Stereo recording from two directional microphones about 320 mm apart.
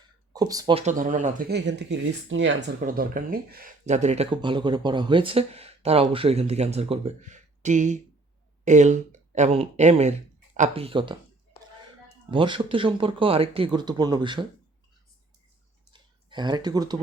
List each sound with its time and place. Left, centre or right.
0.3 s speech: centre
12.3 s speech: centre
15.9 s a sound: centre